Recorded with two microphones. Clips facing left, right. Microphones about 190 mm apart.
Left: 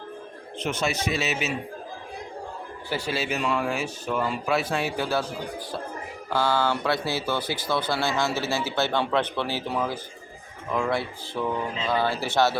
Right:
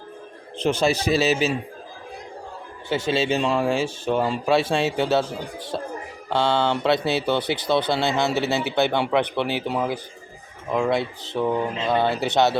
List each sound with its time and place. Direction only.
0.6 s speech: 30° right (ahead or behind)
2.9 s speech: 25° right (ahead or behind)
6.3 s speech: 25° right (ahead or behind)